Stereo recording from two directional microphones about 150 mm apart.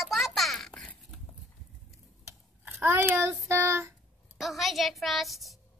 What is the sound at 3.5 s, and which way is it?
Child singing, 15° right (ahead or behind).